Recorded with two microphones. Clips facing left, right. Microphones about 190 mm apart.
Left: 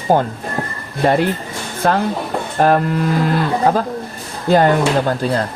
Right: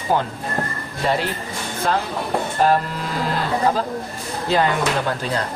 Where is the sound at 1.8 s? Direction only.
55° left (ahead or behind).